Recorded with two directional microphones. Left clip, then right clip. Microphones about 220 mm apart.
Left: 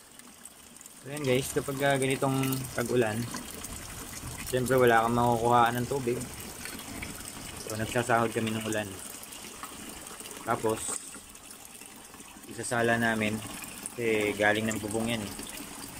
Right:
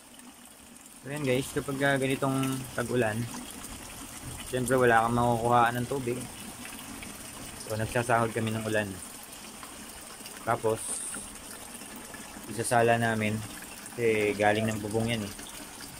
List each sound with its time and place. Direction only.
1.1 s speech: centre (ahead or behind)
4.5 s speech: centre (ahead or behind)
7.7 s speech: centre (ahead or behind)
10.4 s speech: centre (ahead or behind)
12.5 s speech: centre (ahead or behind)